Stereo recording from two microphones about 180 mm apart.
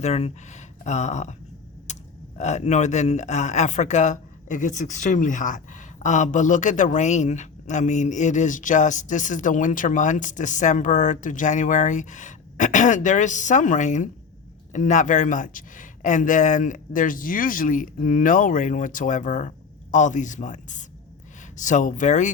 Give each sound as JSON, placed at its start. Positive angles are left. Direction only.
{"t": 0.0, "sound": "speech", "side_deg": 40}
{"t": 1.9, "sound": "a sound", "side_deg": 40}
{"t": 2.4, "sound": "speech", "side_deg": 40}